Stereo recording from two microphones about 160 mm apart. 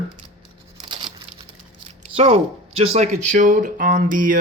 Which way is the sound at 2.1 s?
40° right (ahead or behind).